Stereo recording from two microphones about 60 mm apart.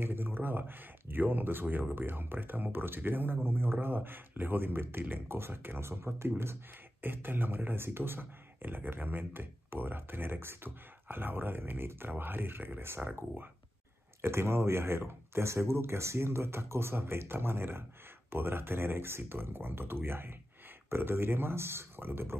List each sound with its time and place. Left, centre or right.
0.0 s speech: right
14.2 s speech: right